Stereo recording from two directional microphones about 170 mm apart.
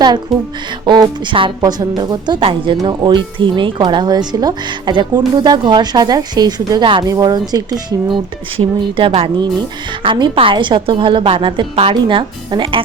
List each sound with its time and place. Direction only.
0.0 s a woman's voice: 25° right (ahead or behind)